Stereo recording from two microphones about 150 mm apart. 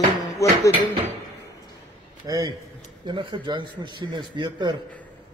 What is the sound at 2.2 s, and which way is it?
A man's voice, 25° right (ahead or behind).